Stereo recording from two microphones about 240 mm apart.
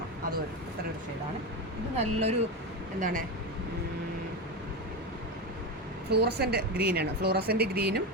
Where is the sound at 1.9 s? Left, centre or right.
Right.